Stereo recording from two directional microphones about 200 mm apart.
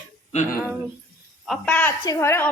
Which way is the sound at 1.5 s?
5° left (ahead or behind).